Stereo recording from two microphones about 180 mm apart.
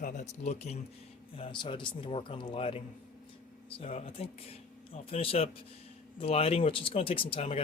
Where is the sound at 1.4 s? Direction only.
25° left (ahead or behind).